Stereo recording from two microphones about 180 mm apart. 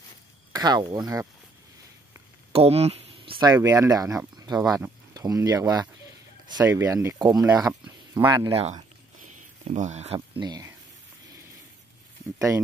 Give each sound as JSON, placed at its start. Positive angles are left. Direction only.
{"t": 0.6, "sound": "speech", "side_deg": -20}
{"t": 2.5, "sound": "speech", "side_deg": -35}
{"t": 3.5, "sound": "speech", "side_deg": -15}
{"t": 8.5, "sound": "speech", "side_deg": -30}